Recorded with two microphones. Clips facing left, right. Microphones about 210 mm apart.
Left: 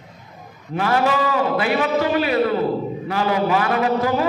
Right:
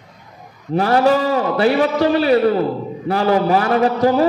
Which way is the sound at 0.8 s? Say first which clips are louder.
Right 5 dB; 35° right (ahead or behind).